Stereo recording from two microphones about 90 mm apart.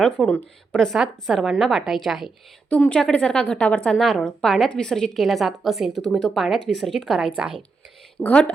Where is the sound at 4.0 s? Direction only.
Centre (ahead or behind).